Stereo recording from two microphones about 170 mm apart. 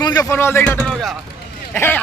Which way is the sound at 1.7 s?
10° left (ahead or behind).